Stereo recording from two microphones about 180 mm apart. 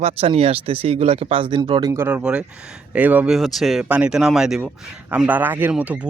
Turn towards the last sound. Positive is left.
turn(degrees=-5)  # may be behind; listen again after turning